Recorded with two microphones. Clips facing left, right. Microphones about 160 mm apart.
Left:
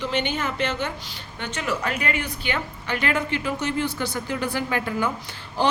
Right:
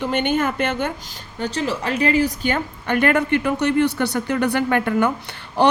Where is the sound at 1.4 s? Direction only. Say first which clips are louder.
Right 4 dB; 35° right (ahead or behind).